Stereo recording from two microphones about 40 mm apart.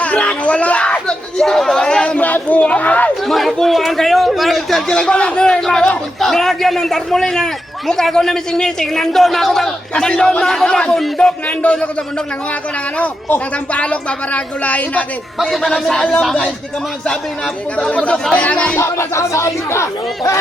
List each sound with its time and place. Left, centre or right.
0.0 s a sound: left
1.4 s a man's voice: centre
2.2 s speech: left
3.2 s a man's voice: centre
4.9 s a man's voice: centre
6.1 s a man's voice: centre; by 11.8 s left
13.7 s speech: left
15.4 s a man's voice: centre
17.7 s speech: left
18.0 s speech: left